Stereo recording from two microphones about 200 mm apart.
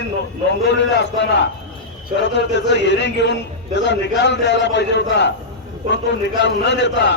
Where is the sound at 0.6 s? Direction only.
60° left (ahead or behind).